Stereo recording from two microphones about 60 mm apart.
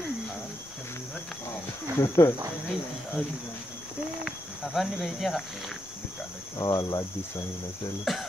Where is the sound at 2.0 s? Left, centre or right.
Left.